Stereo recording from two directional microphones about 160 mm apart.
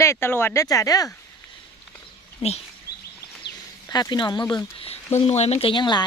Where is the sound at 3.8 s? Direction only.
25° left (ahead or behind).